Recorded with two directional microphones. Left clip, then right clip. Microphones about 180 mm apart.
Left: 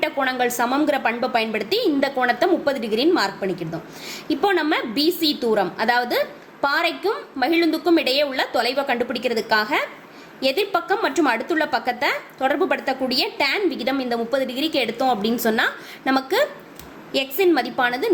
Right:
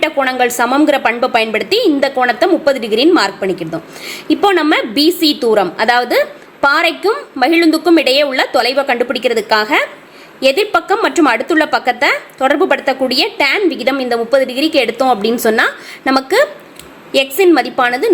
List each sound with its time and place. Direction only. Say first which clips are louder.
0.0 s a woman's voice: right 8 dB; 30° right (ahead or behind)